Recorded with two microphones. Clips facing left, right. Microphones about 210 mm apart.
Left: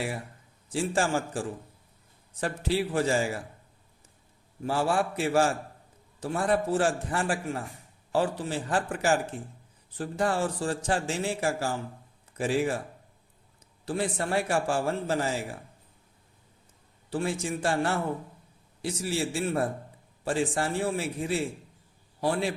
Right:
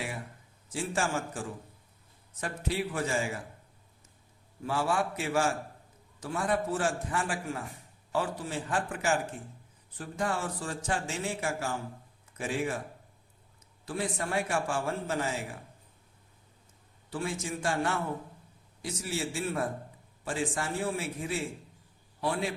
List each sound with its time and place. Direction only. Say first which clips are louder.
0.7 s a man's voice: left 5 dB; 30° left (ahead or behind)
4.6 s a man's voice: left 3 dB; 30° left (ahead or behind)
13.8 s a man's voice: left 4 dB; 30° left (ahead or behind)
17.1 s a man's voice: left 5 dB; 30° left (ahead or behind)